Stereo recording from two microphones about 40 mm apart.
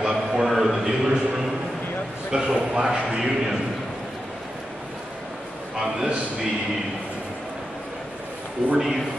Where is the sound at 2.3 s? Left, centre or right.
Right.